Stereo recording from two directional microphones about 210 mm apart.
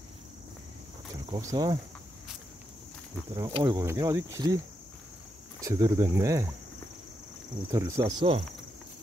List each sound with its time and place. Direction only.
1.3 s speech: 15° right (ahead or behind)
3.3 s speech: 20° right (ahead or behind)
5.6 s speech: 15° right (ahead or behind)
7.7 s speech: 15° right (ahead or behind)